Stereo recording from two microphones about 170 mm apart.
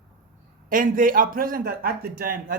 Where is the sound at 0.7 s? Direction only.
55° right (ahead or behind).